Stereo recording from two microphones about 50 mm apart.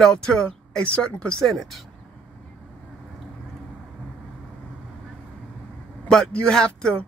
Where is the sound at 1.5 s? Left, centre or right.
Centre.